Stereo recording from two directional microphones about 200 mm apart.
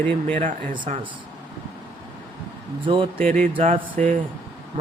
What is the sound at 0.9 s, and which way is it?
Speech, 35° right (ahead or behind).